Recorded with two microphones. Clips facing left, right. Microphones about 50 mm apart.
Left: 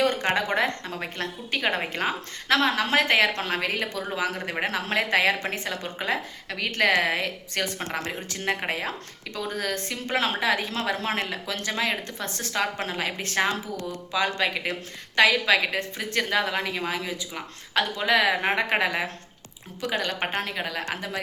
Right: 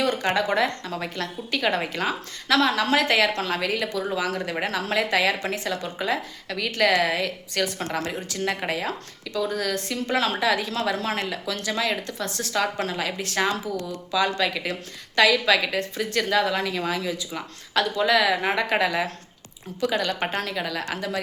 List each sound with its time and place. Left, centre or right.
0.0 s a woman's voice: left